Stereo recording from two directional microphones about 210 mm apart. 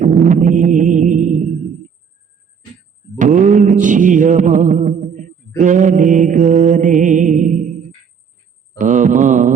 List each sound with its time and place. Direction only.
0.0 s music: 35° right (ahead or behind)
3.2 s mantra: 35° right (ahead or behind)
8.8 s mantra: 35° right (ahead or behind)